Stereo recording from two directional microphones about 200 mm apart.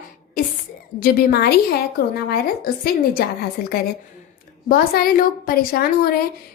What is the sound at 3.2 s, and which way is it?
A woman's voice, 50° left (ahead or behind).